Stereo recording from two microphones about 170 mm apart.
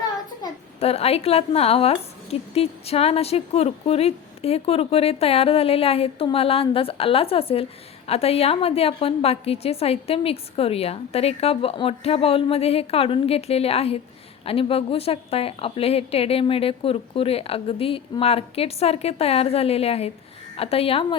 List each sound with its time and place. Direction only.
0.8 s a woman's voice: 35° left (ahead or behind)